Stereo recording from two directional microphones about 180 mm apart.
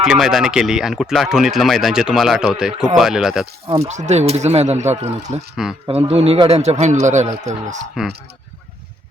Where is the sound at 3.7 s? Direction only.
35° right (ahead or behind).